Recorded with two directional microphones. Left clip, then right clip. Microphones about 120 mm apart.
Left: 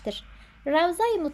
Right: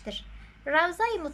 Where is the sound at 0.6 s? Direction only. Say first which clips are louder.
Left 2 dB; 30° left (ahead or behind).